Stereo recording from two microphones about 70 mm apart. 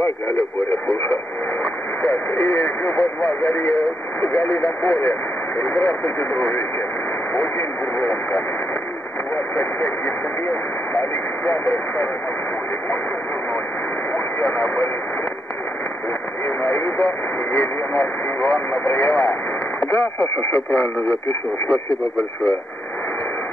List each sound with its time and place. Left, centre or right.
1.6 s radio: left
4.2 s speech: left
9.6 s speech: left
14.1 s speech: left
16.4 s speech: left